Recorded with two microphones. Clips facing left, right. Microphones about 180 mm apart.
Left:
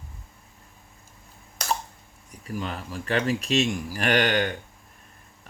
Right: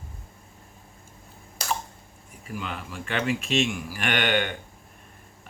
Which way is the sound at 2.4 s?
40° left (ahead or behind).